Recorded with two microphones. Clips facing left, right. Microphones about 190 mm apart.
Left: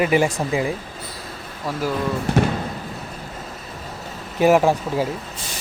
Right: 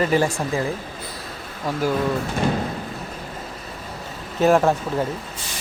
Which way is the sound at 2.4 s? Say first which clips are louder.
Left 5 dB; 75° left (ahead or behind).